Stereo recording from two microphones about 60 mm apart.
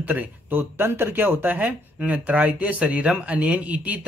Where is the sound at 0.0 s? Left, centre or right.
Right.